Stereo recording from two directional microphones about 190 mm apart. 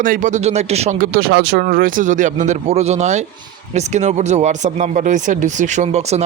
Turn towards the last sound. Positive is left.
turn(degrees=-35)  # may be behind; listen again after turning